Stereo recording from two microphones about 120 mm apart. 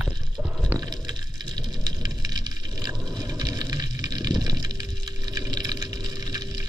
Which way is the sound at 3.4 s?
30° right (ahead or behind).